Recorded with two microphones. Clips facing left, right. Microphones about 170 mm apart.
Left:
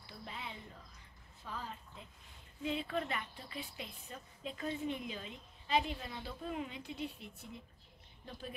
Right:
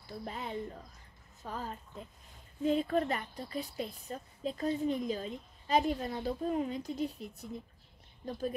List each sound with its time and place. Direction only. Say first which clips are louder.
0.0 s a woman's voice: right 7 dB; 45° right (ahead or behind)